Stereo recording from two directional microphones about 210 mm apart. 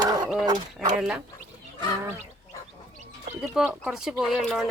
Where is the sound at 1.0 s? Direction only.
5° right (ahead or behind).